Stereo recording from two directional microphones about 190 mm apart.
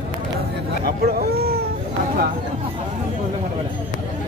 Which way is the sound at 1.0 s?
55° right (ahead or behind).